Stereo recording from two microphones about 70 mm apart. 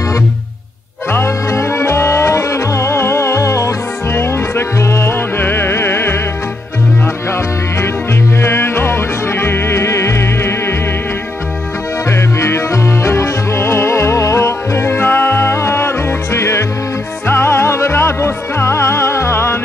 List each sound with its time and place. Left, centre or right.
1.1 s music: left
7.2 s music: left
12.1 s music: left